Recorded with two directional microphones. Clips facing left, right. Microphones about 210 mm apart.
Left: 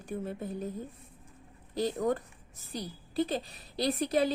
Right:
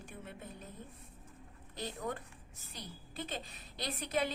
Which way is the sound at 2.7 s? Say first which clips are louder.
Left 12 dB; 35° left (ahead or behind).